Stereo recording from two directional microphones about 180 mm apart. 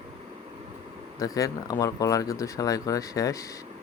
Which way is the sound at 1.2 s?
20° left (ahead or behind).